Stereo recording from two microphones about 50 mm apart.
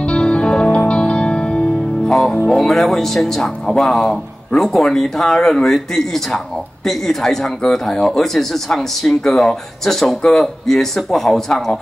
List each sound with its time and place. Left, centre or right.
0.0 s music: left
2.4 s speech: centre